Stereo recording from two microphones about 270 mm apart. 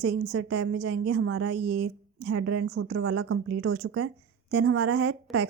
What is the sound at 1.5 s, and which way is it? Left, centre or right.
Speech, right.